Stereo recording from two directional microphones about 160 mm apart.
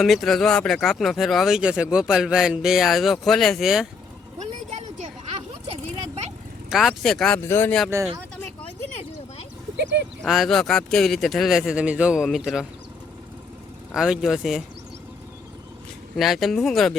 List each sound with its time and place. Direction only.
0.0 s speech: centre (ahead or behind)
6.7 s speech: centre (ahead or behind)
7.9 s speech: 15° right (ahead or behind)
10.2 s speech: centre (ahead or behind)
13.9 s speech: 5° right (ahead or behind)
16.1 s speech: centre (ahead or behind)